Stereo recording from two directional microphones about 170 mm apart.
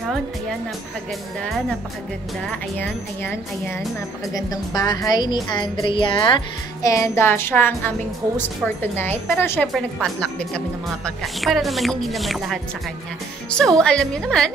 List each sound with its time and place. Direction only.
0.0 s music: centre (ahead or behind)
1.4 s a woman's voice: 5° left (ahead or behind)
8.9 s speech: 10° left (ahead or behind)
9.7 s speech: centre (ahead or behind)
13.6 s speech: 5° left (ahead or behind)